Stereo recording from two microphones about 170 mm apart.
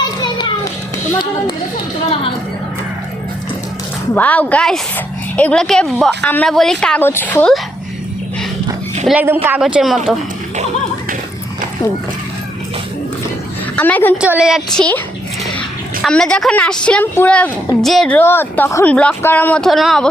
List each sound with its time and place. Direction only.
0.2 s children playing: 25° left (ahead or behind)
4.1 s a woman's voice: 10° left (ahead or behind)
9.0 s speech: 10° right (ahead or behind)
13.7 s a woman's voice: 10° left (ahead or behind)
14.2 s speech: 5° right (ahead or behind)
16.0 s a woman's voice: 5° left (ahead or behind)